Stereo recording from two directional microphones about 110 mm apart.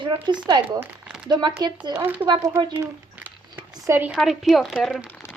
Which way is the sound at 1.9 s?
20° right (ahead or behind).